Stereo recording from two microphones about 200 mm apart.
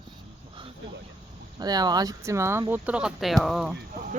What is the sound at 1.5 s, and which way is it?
Speech, 20° right (ahead or behind).